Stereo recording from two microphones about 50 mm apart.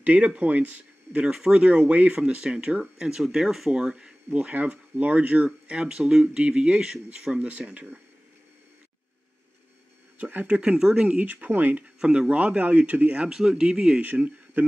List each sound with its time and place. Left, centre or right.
0.0 s speech: right
1.2 s speech: centre
1.6 s speech: right; by 3.8 s centre
3.8 s speech: centre
10.1 s speech: right
10.6 s speech: centre
11.1 s speech: right
12.0 s speech: right
13.3 s speech: centre
14.1 s speech: right